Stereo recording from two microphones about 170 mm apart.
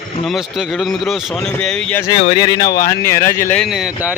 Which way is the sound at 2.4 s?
20° left (ahead or behind).